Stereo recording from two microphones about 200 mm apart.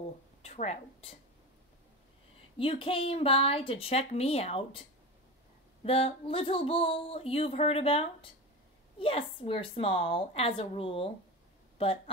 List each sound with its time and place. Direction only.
0.0 s a sound: 30° left (ahead or behind)
2.5 s speech: 25° left (ahead or behind)
5.9 s speech: 30° left (ahead or behind)